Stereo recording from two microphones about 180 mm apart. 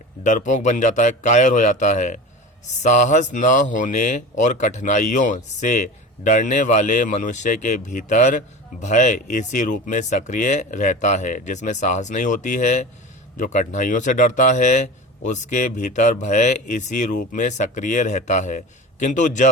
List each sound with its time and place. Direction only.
0.2 s speech: 45° left (ahead or behind)